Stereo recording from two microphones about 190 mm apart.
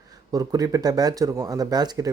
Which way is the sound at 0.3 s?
20° right (ahead or behind).